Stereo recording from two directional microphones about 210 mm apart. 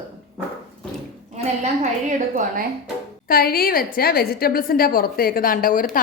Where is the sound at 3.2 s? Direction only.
45° left (ahead or behind).